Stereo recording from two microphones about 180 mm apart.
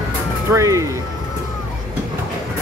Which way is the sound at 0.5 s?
15° right (ahead or behind).